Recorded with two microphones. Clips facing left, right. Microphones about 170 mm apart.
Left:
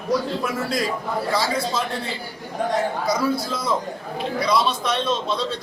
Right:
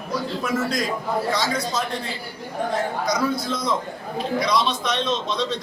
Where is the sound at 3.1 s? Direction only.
30° left (ahead or behind).